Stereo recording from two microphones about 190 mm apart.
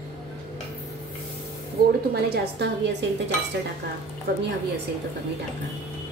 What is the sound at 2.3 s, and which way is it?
Speech, 65° right (ahead or behind).